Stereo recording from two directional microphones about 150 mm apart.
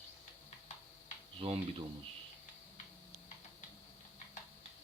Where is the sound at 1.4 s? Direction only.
40° right (ahead or behind).